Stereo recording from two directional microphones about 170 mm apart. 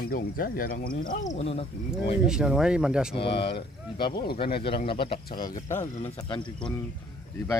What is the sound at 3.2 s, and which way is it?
Speech, 80° left.